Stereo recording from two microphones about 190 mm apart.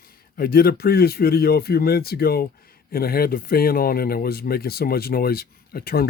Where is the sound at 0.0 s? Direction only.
50° left (ahead or behind).